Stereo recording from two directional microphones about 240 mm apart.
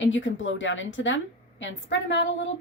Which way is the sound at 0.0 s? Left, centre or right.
Left.